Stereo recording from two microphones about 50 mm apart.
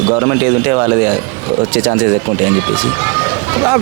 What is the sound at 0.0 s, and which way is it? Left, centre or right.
Speech, right.